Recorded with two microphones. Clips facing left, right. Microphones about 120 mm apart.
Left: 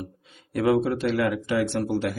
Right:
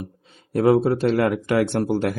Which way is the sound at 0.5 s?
35° right (ahead or behind).